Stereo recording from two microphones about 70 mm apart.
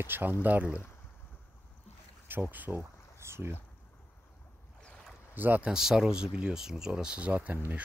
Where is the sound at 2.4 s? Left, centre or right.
Right.